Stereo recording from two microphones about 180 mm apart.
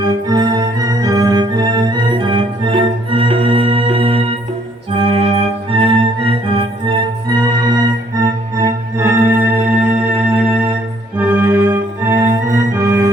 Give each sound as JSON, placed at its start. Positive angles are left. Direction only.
{"t": 0.3, "sound": "organ", "side_deg": -20}
{"t": 4.9, "sound": "music", "side_deg": -35}
{"t": 11.2, "sound": "organ", "side_deg": -10}